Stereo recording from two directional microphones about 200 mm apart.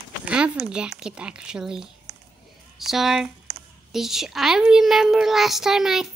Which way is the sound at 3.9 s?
Centre (ahead or behind).